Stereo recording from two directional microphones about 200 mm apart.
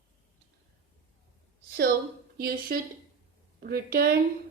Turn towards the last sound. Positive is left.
turn(degrees=-50)  # may be behind; listen again after turning